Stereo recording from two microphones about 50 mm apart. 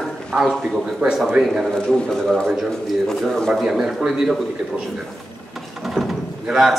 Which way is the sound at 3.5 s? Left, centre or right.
Centre.